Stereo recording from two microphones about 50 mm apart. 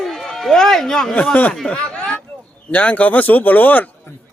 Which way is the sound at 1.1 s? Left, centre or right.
Left.